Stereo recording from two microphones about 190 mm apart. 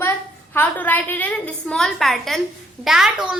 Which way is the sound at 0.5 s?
10° left (ahead or behind).